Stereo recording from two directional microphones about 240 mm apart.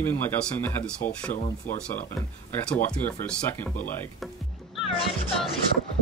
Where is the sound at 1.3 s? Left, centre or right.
Left.